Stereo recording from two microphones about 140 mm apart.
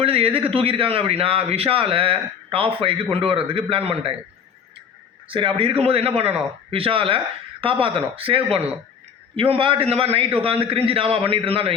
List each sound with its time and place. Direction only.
0.0 s a man's voice: 45° right (ahead or behind)
5.3 s a man's voice: 40° right (ahead or behind)